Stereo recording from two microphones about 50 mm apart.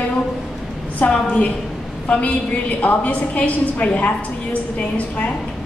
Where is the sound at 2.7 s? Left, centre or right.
Left.